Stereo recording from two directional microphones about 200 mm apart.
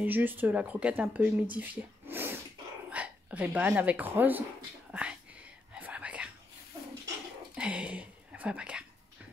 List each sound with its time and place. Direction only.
0.0 s speech: 10° right (ahead or behind)
5.8 s whispering: 5° right (ahead or behind)
7.5 s a sound: 5° right (ahead or behind)